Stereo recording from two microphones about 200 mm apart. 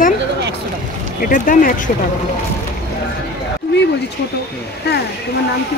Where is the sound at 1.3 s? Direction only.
45° left (ahead or behind).